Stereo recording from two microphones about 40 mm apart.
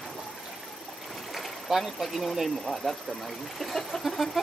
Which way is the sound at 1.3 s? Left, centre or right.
Centre.